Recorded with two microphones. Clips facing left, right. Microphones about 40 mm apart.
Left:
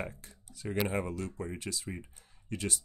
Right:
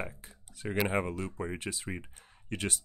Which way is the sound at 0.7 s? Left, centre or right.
Right.